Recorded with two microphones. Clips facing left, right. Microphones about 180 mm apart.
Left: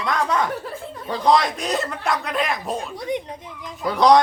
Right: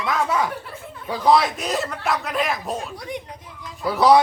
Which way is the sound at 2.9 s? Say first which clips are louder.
Left 6 dB; 20° left (ahead or behind).